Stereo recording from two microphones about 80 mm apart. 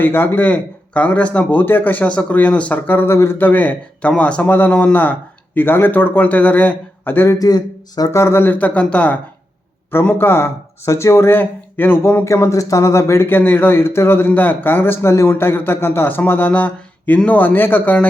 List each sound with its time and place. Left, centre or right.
0.0 s a man's voice: left
0.4 s a man's voice: centre
7.3 s speech: left
8.1 s a man's voice: left
12.2 s a man's voice: left